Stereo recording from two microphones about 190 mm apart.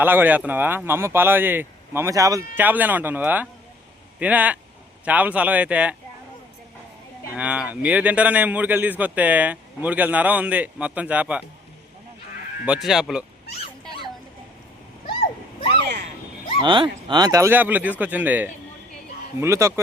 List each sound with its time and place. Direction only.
0.0 s a man's voice: 10° right (ahead or behind)
7.3 s a man's voice: 5° right (ahead or behind)
12.6 s speech: 5° right (ahead or behind)
15.0 s a sound: 30° left (ahead or behind)
15.7 s a sound: 60° right (ahead or behind)
16.6 s a man's voice: 25° right (ahead or behind)